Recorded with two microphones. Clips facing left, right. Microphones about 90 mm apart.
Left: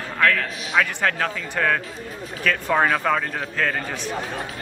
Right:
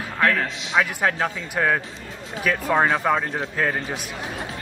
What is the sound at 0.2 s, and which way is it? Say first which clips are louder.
A man's voice: even; 20° right (ahead or behind).